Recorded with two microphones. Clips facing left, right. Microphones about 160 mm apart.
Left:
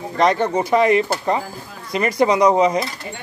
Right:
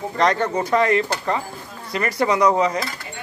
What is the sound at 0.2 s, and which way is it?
Speech, 15° left (ahead or behind).